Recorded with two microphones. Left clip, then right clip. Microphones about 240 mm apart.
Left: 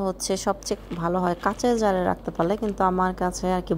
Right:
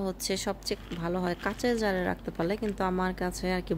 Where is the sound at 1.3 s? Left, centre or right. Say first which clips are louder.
Left 7 dB; centre.